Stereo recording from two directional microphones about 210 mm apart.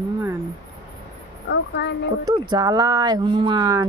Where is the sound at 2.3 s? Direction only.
20° right (ahead or behind).